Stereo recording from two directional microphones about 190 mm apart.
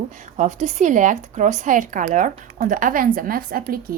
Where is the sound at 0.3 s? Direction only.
40° right (ahead or behind).